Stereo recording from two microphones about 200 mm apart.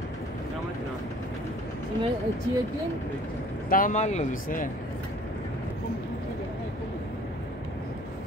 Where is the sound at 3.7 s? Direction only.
40° left (ahead or behind).